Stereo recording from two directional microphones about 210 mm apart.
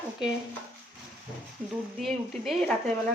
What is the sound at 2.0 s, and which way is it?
Speech, centre (ahead or behind).